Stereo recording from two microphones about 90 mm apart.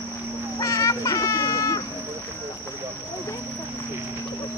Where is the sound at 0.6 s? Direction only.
40° left (ahead or behind).